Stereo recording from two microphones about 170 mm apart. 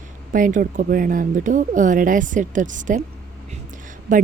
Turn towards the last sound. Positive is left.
turn(degrees=-50)  # may be behind; listen again after turning